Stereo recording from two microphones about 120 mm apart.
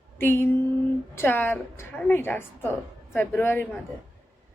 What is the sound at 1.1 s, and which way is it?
A woman's voice, 20° left (ahead or behind).